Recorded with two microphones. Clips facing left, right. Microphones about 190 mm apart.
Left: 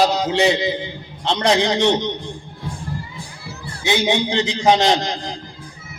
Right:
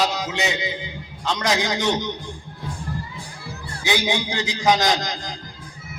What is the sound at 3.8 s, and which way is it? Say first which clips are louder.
A man's voice: left 4 dB; 25° left (ahead or behind).